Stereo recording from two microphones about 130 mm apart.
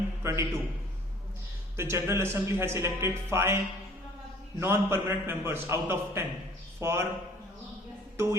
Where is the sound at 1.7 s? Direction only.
20° right (ahead or behind).